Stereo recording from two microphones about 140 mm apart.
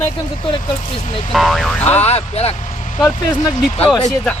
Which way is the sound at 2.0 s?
50° left (ahead or behind).